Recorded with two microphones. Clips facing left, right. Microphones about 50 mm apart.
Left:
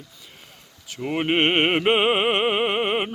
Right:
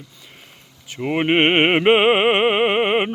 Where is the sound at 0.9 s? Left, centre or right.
Right.